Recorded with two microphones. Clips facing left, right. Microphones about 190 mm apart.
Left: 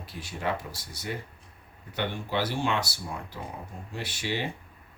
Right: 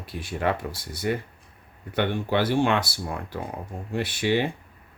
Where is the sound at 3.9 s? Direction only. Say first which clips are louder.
Right 9 dB; 55° right (ahead or behind).